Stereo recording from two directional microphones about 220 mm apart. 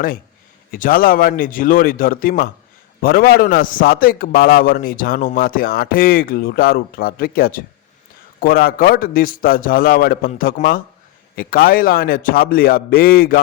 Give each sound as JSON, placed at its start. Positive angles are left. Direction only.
{"t": 0.7, "sound": "a man's voice", "side_deg": 40}